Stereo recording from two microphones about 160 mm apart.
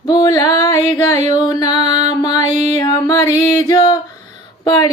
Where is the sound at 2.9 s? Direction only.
20° left (ahead or behind).